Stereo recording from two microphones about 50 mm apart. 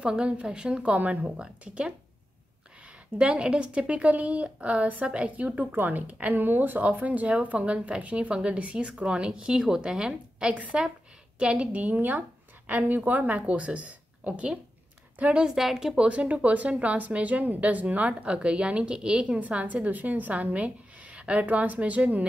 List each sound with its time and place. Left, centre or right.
0.0 s a woman's voice: right
0.9 s a woman's voice: right
1.3 s a woman's voice: centre
3.2 s a woman's voice: right
15.5 s speech: centre
16.1 s a woman's voice: right
19.4 s a woman's voice: right